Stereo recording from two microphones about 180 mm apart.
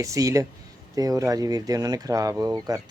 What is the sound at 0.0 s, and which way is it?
Speech, 15° right (ahead or behind).